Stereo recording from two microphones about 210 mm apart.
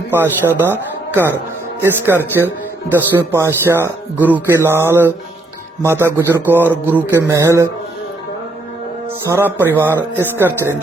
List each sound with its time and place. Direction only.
0.1 s speech: 10° right (ahead or behind)
9.2 s speech: 10° right (ahead or behind)